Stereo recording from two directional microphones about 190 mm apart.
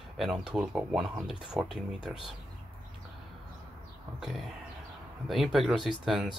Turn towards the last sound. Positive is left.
turn(degrees=0)  # may be behind; listen again after turning